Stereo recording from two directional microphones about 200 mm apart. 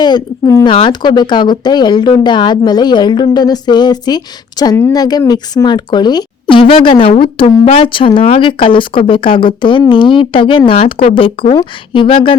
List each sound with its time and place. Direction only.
0.0 s speech: 20° left (ahead or behind)